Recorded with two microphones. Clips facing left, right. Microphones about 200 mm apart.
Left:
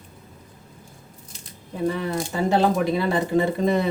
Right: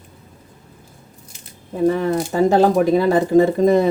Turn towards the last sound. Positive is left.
turn(degrees=-45)  # may be behind; listen again after turning